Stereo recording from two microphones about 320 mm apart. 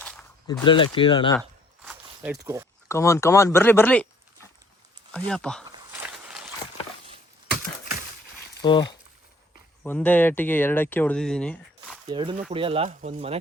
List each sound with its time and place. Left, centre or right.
0.0 s speech: centre
1.4 s a sound: centre
2.9 s speech: centre
5.3 s speech: centre
5.6 s walk: centre
8.6 s speech: centre
12.0 s speech: centre